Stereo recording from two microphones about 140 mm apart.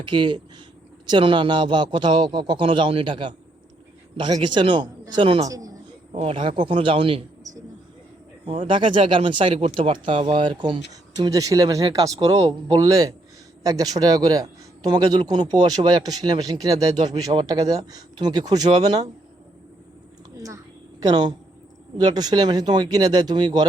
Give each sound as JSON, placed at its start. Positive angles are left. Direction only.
{"t": 0.0, "sound": "a man's voice", "side_deg": -35}
{"t": 4.4, "sound": "a man's voice", "side_deg": -35}
{"t": 5.5, "sound": "speech", "side_deg": -25}
{"t": 6.1, "sound": "a man's voice", "side_deg": -40}
{"t": 8.4, "sound": "a man's voice", "side_deg": -40}
{"t": 21.0, "sound": "speech", "side_deg": -30}